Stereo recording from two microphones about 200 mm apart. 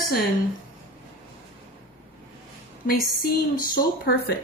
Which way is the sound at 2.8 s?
45° left (ahead or behind).